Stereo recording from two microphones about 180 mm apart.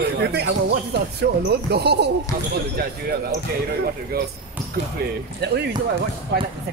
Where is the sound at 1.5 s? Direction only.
65° right (ahead or behind).